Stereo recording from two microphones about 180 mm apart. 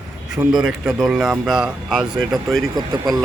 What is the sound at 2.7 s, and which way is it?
Speech, 20° right (ahead or behind).